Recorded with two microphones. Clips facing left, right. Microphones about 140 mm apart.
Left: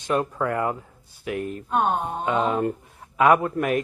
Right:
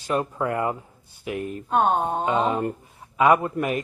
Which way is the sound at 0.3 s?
15° right (ahead or behind).